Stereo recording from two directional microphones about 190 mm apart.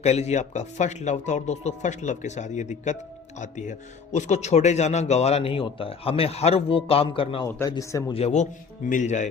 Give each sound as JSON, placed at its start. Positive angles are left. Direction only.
{"t": 0.0, "sound": "speech", "side_deg": 35}
{"t": 7.4, "sound": "a man's voice", "side_deg": 15}
{"t": 8.1, "sound": "speech", "side_deg": 35}